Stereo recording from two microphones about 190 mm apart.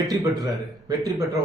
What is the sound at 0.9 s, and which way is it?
Speech, 15° right (ahead or behind).